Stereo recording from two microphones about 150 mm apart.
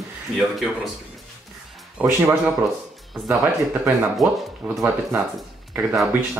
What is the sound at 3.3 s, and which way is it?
Speech, 20° right (ahead or behind).